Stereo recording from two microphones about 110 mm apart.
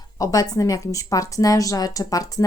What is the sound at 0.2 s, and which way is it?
A woman's voice, 35° left (ahead or behind).